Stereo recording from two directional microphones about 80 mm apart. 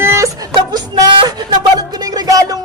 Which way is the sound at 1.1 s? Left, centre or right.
Right.